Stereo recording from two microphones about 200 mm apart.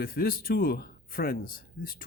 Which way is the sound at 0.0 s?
50° left (ahead or behind).